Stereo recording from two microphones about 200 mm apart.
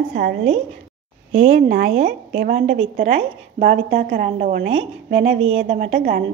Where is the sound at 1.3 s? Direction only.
30° right (ahead or behind).